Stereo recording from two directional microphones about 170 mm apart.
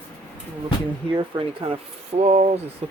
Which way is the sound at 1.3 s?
30° right (ahead or behind).